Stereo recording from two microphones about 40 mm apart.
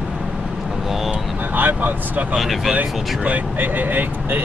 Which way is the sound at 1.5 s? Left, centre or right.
Right.